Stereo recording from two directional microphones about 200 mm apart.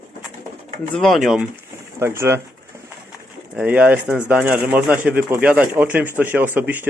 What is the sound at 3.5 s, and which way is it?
Speech, 5° right (ahead or behind).